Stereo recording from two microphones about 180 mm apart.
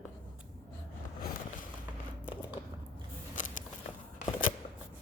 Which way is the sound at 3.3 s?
45° left (ahead or behind).